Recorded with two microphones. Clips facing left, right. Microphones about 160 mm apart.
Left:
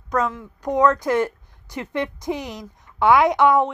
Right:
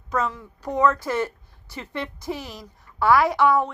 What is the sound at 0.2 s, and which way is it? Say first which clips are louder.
A woman's voice: left 3 dB; 15° left (ahead or behind).